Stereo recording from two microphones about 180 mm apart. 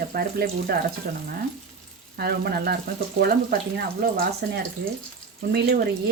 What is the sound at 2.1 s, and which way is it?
Speech, 60° right (ahead or behind).